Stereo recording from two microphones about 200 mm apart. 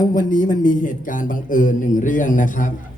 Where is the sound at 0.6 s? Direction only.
40° left (ahead or behind).